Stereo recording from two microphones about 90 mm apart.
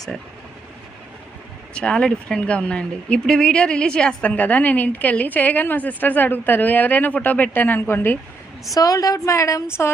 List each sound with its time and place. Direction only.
1.7 s speech: 10° left (ahead or behind)
8.7 s a woman's voice: 40° left (ahead or behind)